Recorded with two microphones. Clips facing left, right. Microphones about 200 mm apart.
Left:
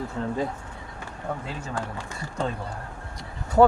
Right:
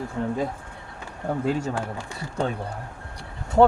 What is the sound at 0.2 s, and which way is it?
Speech, 15° right (ahead or behind).